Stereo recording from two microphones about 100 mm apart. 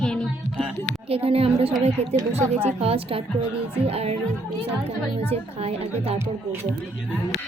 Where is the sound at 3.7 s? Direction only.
85° right.